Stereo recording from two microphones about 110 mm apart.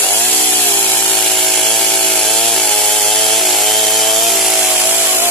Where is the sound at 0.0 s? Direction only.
15° left (ahead or behind).